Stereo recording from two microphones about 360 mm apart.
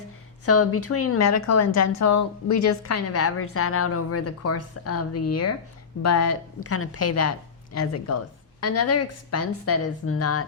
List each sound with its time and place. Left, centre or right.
0.4 s a woman's voice: left